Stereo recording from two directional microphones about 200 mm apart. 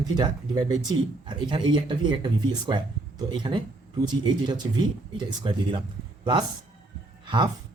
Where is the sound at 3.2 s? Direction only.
25° right (ahead or behind).